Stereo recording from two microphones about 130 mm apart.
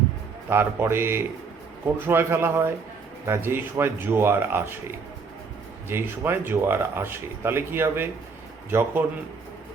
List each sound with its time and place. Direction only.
0.5 s a man's voice: 15° right (ahead or behind)